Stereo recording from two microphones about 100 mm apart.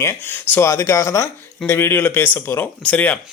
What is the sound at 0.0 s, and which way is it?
Speech, 25° left (ahead or behind).